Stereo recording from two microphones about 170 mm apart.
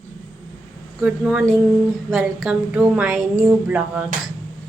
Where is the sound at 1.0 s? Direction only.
5° right (ahead or behind).